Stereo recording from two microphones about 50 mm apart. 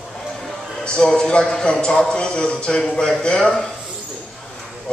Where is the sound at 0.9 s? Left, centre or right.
Centre.